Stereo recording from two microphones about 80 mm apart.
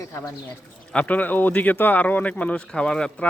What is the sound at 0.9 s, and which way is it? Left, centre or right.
Speech, centre.